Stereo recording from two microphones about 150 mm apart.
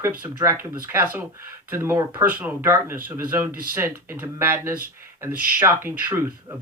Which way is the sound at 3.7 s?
15° right (ahead or behind).